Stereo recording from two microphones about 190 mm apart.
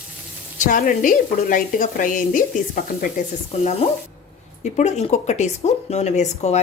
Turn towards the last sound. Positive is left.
turn(degrees=35)  # may be behind; listen again after turning